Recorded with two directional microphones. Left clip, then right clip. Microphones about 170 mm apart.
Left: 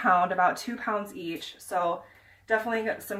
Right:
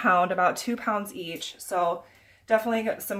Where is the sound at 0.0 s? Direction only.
45° right (ahead or behind).